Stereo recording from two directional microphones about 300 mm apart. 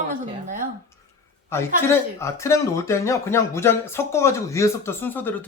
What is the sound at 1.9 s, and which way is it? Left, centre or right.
Speech, centre.